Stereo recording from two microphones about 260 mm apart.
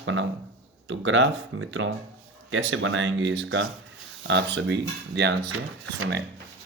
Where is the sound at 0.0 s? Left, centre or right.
Right.